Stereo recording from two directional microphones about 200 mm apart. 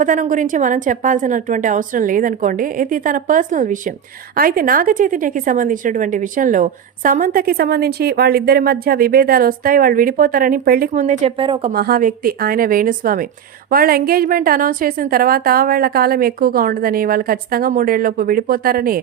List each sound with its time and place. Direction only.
0.0 s a woman's voice: 40° right (ahead or behind); by 11.7 s 25° right (ahead or behind)
11.7 s a woman's voice: 50° right (ahead or behind)